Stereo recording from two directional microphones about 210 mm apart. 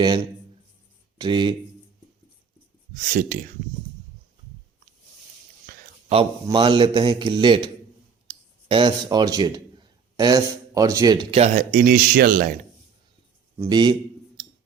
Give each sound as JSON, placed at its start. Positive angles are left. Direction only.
{"t": 1.2, "sound": "a man's voice", "side_deg": -20}
{"t": 3.1, "sound": "speech", "side_deg": -40}
{"t": 6.1, "sound": "a man's voice", "side_deg": -25}
{"t": 13.6, "sound": "a man's voice", "side_deg": -20}